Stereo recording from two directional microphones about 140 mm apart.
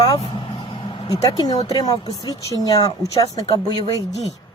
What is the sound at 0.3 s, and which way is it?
Vehicle, 35° left (ahead or behind).